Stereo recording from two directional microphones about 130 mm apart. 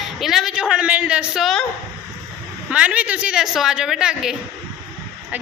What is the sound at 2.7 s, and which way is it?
A woman's voice, 10° right (ahead or behind).